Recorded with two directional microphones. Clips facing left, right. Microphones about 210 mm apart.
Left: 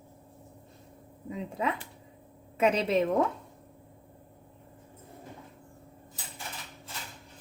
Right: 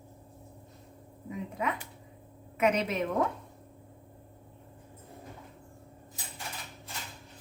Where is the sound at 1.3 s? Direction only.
30° left (ahead or behind).